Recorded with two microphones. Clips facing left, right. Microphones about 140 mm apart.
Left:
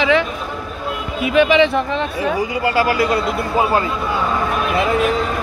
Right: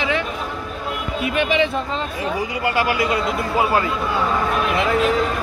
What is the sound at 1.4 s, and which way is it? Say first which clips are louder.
Speech: left 7 dB; 90° left.